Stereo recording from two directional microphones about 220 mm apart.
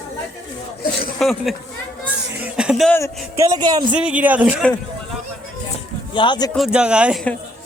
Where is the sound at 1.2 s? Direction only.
Centre (ahead or behind).